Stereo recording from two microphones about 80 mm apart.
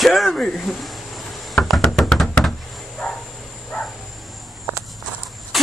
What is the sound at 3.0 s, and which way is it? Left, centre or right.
Vehicle, centre.